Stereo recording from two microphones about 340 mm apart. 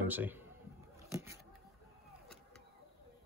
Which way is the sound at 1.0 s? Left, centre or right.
Centre.